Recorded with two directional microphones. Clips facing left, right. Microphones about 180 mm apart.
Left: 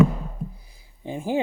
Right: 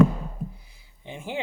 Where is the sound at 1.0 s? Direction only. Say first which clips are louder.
Left 8 dB; 40° left (ahead or behind).